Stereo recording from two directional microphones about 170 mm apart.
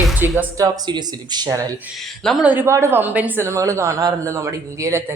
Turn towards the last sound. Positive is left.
turn(degrees=-15)  # may be behind; listen again after turning